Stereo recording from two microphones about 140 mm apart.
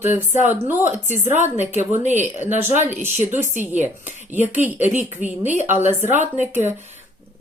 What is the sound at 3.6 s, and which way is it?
Speech, 15° right (ahead or behind).